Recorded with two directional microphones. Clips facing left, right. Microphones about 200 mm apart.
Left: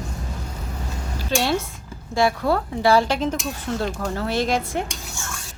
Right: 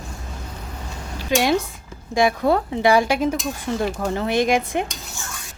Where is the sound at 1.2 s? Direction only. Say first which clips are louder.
Right 3 dB; 15° right (ahead or behind).